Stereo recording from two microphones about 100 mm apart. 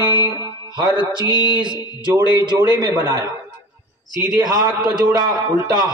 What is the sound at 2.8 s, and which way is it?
Speech, 40° right (ahead or behind).